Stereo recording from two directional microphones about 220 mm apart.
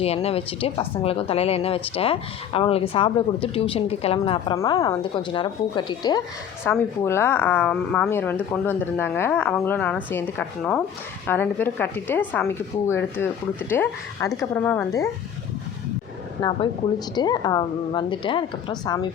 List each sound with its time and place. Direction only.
0.0 s a woman's voice: 25° left (ahead or behind); by 15.0 s 10° left (ahead or behind)
16.4 s a woman's voice: 20° left (ahead or behind)